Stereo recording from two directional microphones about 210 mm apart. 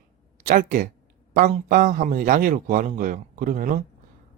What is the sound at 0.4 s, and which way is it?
Speech, 40° right (ahead or behind).